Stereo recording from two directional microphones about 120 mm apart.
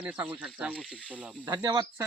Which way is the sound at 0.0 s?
10° right (ahead or behind).